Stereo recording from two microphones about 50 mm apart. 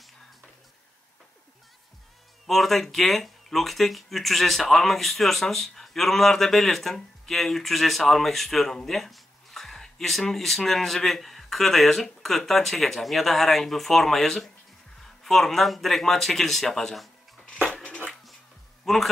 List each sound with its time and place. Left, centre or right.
2.4 s speech: centre
17.8 s a sound: left
18.9 s a man's voice: centre